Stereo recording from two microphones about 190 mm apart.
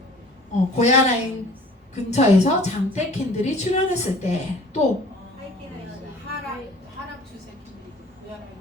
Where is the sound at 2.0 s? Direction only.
35° left (ahead or behind).